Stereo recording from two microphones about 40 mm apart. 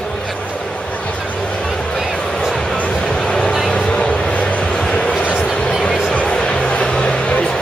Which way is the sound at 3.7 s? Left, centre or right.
Left.